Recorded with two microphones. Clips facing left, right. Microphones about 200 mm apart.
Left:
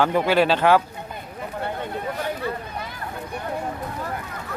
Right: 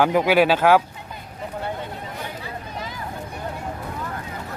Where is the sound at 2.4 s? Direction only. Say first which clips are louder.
Left 4 dB; 60° left (ahead or behind).